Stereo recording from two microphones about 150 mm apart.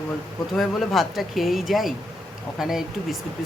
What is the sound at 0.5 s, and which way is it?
Speech, centre (ahead or behind).